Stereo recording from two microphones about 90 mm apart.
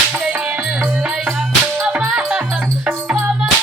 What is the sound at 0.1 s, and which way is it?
Music, 10° right (ahead or behind).